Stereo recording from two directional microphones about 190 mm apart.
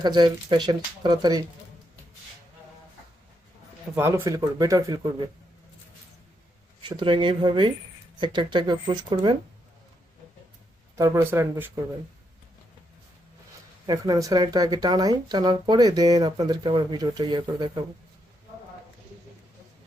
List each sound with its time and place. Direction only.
0.0 s speech: 25° right (ahead or behind)
3.9 s speech: 15° right (ahead or behind)
6.8 s speech: 25° right (ahead or behind)
10.9 s speech: 15° right (ahead or behind)
13.8 s speech: 20° right (ahead or behind)